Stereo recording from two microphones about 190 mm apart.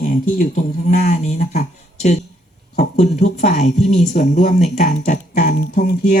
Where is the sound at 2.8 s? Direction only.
35° left (ahead or behind).